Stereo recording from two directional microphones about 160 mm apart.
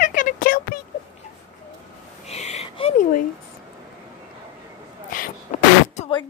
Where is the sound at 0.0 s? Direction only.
55° left (ahead or behind).